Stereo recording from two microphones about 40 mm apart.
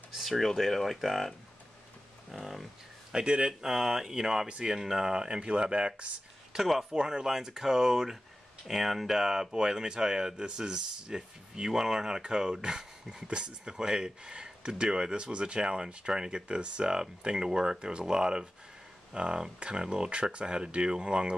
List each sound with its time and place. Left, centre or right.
0.1 s speech: centre
2.3 s speech: centre
3.1 s speech: right
4.5 s speech: right
4.7 s speech: centre
6.5 s speech: centre
6.9 s speech: centre
8.6 s speech: centre; by 21.4 s right